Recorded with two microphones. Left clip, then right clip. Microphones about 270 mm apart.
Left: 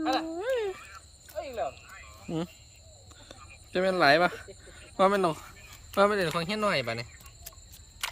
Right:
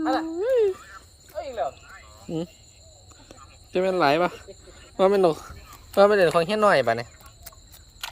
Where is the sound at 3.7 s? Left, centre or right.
Centre.